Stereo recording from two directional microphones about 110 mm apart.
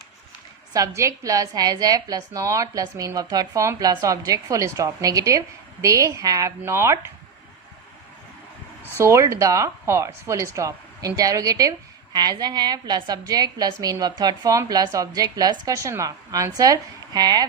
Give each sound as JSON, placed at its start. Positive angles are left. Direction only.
{"t": 0.7, "sound": "a woman's voice", "side_deg": -30}
{"t": 9.0, "sound": "a woman's voice", "side_deg": -25}